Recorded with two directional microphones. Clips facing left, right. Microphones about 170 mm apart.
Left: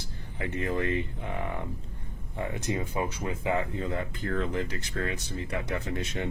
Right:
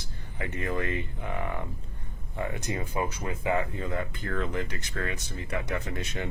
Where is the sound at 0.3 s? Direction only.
30° left (ahead or behind).